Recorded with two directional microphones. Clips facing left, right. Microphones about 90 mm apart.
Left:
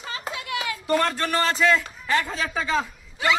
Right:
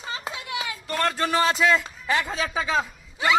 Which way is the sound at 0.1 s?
25° right (ahead or behind).